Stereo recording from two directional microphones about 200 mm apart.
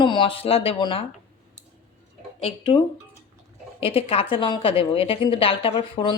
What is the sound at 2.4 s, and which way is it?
A woman's voice, 30° left (ahead or behind).